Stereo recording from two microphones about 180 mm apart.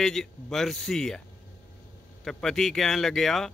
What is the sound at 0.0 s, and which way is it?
Speech, centre (ahead or behind).